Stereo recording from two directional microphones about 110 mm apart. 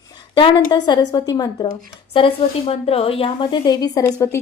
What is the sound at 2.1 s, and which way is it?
A woman's voice, 60° left (ahead or behind).